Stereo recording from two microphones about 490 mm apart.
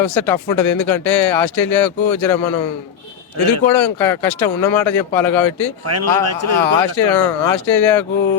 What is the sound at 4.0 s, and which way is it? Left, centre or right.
Speech, centre.